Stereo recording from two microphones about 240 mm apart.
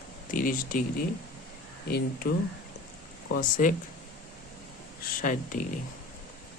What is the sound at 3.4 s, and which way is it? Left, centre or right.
Speech, left.